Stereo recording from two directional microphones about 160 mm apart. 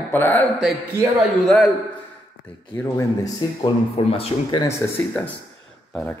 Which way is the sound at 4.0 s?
40° left (ahead or behind).